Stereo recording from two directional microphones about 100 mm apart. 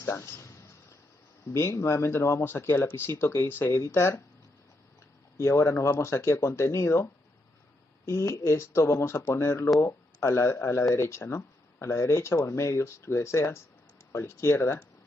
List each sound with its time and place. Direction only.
0.0 s a sound: 25° left (ahead or behind)
1.5 s speech: 25° left (ahead or behind)
5.4 s speech: 30° left (ahead or behind)